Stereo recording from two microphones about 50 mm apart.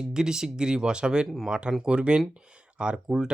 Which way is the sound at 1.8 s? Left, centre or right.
Centre.